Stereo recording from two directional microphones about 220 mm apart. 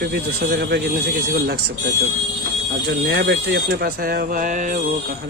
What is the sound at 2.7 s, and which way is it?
Speech, 50° right (ahead or behind).